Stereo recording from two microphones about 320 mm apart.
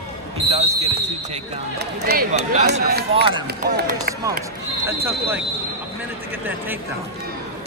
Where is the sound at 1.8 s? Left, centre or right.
Right.